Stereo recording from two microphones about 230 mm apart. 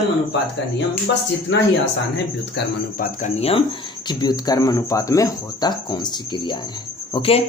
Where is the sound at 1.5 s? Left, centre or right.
Left.